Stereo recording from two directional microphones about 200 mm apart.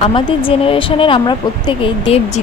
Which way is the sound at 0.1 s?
25° left (ahead or behind).